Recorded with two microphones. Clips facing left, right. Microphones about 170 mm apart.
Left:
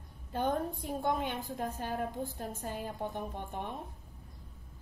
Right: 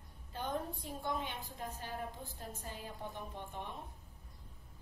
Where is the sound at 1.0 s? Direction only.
55° left (ahead or behind).